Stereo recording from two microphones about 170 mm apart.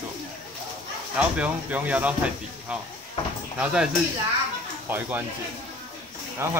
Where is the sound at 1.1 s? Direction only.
10° right (ahead or behind).